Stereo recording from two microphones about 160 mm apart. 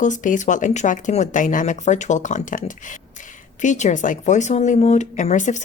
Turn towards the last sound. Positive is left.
turn(degrees=50)  # may be behind; listen again after turning